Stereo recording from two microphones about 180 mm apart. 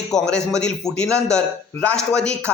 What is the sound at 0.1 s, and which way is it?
A man's voice, 5° left (ahead or behind).